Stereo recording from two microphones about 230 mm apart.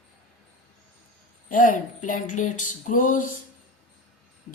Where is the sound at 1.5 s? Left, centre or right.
Left.